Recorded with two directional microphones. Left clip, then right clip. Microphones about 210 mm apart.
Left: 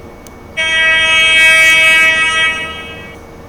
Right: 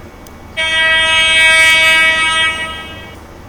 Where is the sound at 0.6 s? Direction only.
15° right (ahead or behind).